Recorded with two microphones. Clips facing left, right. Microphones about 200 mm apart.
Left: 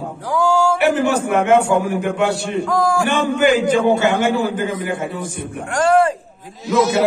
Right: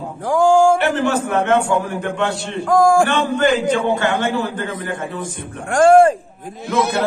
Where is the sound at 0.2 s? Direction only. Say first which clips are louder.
Right 4 dB; 50° right (ahead or behind).